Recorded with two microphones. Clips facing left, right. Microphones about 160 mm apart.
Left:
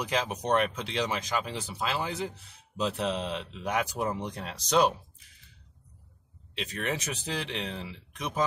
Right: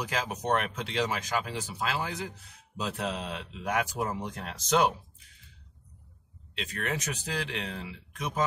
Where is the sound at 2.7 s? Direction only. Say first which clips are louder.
Left 3 dB; centre (ahead or behind).